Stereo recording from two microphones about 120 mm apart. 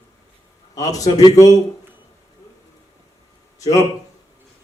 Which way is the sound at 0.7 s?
30° left (ahead or behind).